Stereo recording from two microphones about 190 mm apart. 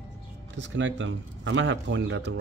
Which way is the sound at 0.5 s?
70° right (ahead or behind).